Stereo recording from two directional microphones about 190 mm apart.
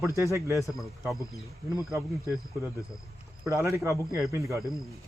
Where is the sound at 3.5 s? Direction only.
15° right (ahead or behind).